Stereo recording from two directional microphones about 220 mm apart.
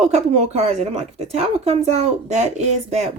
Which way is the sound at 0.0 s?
30° right (ahead or behind).